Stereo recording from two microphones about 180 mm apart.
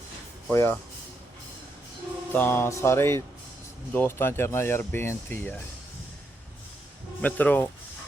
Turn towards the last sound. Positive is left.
turn(degrees=10)  # may be behind; listen again after turning